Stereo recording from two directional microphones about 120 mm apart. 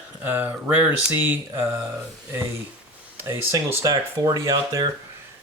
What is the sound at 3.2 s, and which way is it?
Speech, 20° right (ahead or behind).